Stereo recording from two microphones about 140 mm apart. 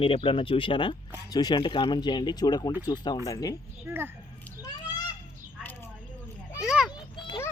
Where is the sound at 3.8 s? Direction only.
15° right (ahead or behind).